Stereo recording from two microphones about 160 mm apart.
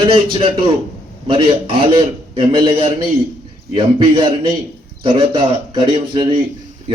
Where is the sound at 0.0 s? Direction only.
35° right (ahead or behind).